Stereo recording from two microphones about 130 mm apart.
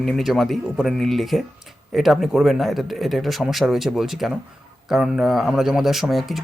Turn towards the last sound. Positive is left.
turn(degrees=0)  # may be behind; listen again after turning